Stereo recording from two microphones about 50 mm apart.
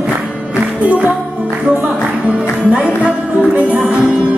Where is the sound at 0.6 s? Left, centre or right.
Right.